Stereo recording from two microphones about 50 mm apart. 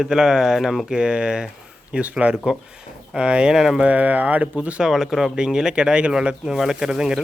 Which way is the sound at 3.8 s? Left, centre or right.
Right.